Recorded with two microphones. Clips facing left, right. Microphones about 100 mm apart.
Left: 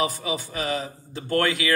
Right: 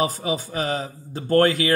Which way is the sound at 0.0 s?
35° right (ahead or behind).